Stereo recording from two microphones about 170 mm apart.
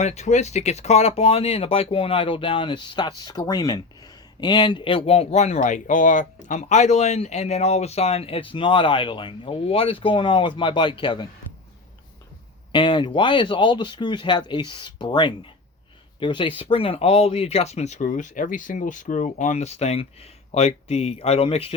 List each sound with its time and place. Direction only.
0.0 s speech: 40° left (ahead or behind); by 11.3 s 25° left (ahead or behind)
12.7 s speech: 30° left (ahead or behind)